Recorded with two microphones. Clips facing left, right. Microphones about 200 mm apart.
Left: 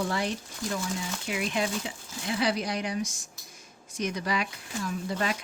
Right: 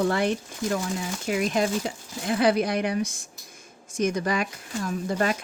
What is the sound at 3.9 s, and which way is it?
Speech, 45° right (ahead or behind).